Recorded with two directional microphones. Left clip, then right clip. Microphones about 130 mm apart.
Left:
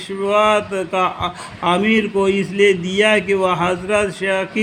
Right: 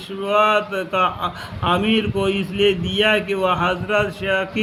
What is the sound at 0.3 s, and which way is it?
A man's voice, 45° left (ahead or behind).